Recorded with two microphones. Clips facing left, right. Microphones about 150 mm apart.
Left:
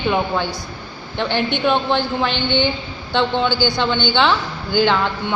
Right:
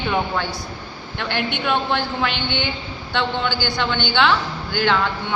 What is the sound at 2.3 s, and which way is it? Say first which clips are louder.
Speech: left 6 dB; 10° right (ahead or behind).